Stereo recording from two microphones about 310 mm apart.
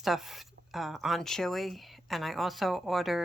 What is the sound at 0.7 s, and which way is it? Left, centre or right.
Speech, centre.